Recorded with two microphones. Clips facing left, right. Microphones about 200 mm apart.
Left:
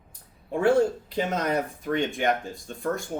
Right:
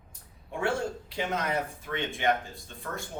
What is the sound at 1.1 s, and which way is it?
Speech, 40° left (ahead or behind).